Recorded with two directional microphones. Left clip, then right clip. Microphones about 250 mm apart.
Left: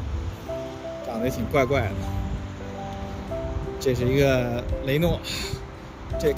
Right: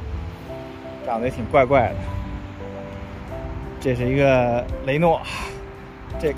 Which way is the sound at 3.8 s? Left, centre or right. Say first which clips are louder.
Right 3 dB; centre.